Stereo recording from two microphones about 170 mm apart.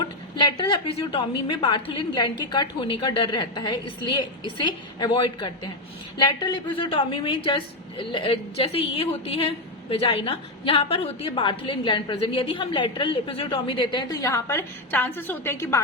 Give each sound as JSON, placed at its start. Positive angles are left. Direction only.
{"t": 0.3, "sound": "a woman's voice", "side_deg": 25}